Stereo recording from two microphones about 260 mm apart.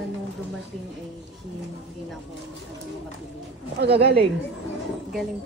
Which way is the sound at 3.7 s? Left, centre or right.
Right.